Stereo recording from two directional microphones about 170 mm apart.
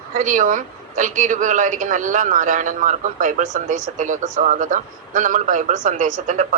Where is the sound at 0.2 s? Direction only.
50° right (ahead or behind).